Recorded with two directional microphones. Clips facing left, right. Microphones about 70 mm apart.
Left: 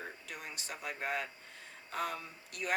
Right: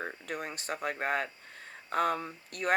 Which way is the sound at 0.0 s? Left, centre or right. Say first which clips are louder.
Right 8 dB; right.